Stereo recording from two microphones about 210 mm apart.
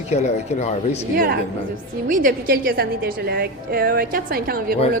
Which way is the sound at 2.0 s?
40° right (ahead or behind).